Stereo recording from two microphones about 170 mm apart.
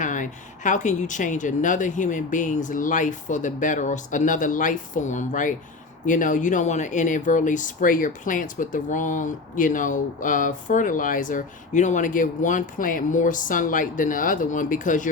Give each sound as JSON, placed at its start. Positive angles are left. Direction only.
{"t": 0.0, "sound": "speech", "side_deg": 50}